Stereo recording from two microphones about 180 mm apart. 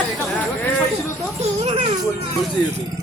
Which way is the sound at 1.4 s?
30° right (ahead or behind).